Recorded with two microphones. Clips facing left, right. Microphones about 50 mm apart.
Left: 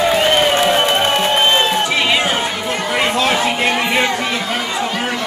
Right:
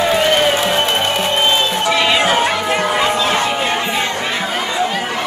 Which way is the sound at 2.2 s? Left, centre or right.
Right.